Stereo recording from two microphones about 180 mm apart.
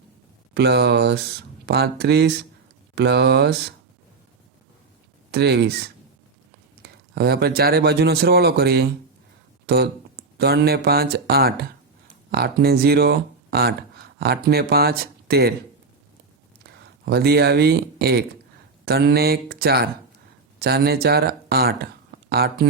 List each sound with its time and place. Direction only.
0.5 s speech: 65° right (ahead or behind)
5.3 s speech: 65° right (ahead or behind)
16.6 s speech: 60° right (ahead or behind)